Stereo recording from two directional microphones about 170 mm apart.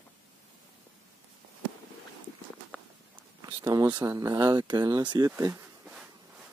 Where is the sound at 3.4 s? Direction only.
25° right (ahead or behind).